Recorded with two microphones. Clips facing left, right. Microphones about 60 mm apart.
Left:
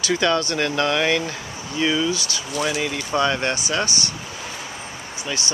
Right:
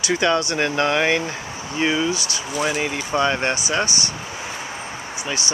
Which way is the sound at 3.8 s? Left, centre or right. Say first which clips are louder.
Right 1 dB; left.